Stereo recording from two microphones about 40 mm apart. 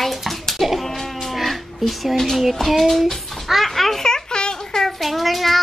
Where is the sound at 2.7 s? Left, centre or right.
Centre.